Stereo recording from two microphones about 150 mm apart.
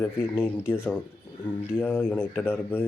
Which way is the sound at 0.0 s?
15° left (ahead or behind).